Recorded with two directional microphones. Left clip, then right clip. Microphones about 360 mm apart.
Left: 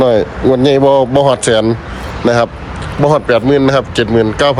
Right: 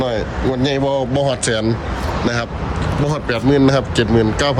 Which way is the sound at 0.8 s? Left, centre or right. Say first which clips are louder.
Left 9 dB; left.